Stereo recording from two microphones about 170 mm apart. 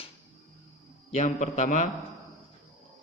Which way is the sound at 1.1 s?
45° left (ahead or behind).